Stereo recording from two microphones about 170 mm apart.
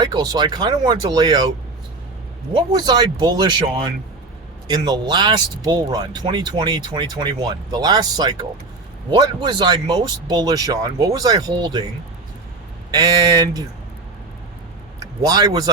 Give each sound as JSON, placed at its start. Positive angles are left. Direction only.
{"t": 0.0, "sound": "speech", "side_deg": -25}
{"t": 4.7, "sound": "speech", "side_deg": -25}
{"t": 12.9, "sound": "speech", "side_deg": -25}
{"t": 14.9, "sound": "speech", "side_deg": -20}